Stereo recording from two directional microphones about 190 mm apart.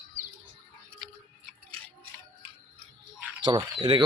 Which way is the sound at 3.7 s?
30° right (ahead or behind).